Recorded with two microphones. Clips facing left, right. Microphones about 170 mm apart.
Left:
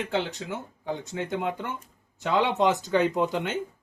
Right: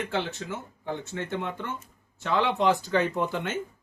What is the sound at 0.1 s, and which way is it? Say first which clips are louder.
Speech: left 2 dB; 20° left (ahead or behind).